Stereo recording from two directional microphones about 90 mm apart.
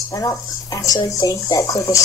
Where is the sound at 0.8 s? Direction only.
40° left (ahead or behind).